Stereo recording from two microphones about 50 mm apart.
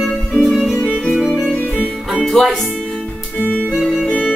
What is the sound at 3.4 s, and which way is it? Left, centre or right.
Music, left.